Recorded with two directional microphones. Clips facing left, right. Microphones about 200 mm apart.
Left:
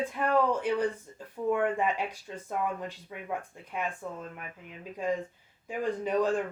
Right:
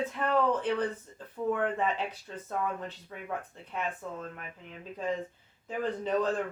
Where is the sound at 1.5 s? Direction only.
15° left (ahead or behind).